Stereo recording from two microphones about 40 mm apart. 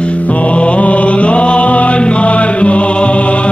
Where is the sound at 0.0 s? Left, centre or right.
Left.